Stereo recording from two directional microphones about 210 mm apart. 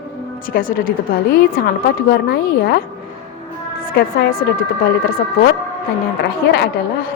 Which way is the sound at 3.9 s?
45° left (ahead or behind).